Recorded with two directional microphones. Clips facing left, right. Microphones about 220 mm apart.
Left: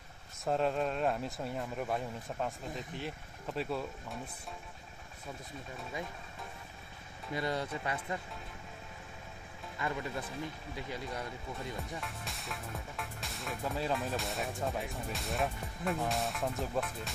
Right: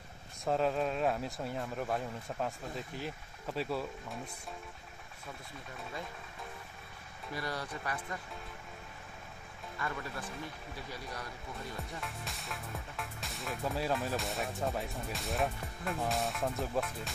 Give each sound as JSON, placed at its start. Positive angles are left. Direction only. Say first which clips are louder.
{"t": 0.5, "sound": "speech", "louder": "even", "side_deg": 0}
{"t": 7.3, "sound": "speech", "louder": "left 4 dB", "side_deg": 20}
{"t": 9.8, "sound": "speech", "louder": "left 3 dB", "side_deg": 20}
{"t": 11.9, "sound": "speech", "louder": "left 1 dB", "side_deg": 0}